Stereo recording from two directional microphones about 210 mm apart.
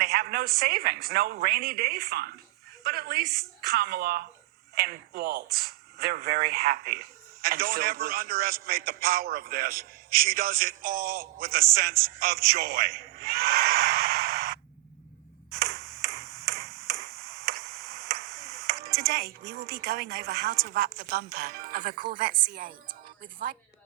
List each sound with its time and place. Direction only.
0.0 s speech: 45° right (ahead or behind)
12.2 s a sound: 45° right (ahead or behind)
18.9 s music: 50° right (ahead or behind)
19.6 s speech: 50° right (ahead or behind)